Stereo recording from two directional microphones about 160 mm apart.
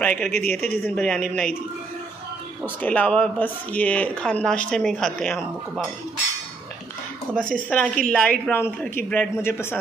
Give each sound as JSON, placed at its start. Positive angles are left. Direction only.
{"t": 0.0, "sound": "speech", "side_deg": 10}
{"t": 2.6, "sound": "speech", "side_deg": 10}
{"t": 7.3, "sound": "speech", "side_deg": -55}
{"t": 7.7, "sound": "speech", "side_deg": 5}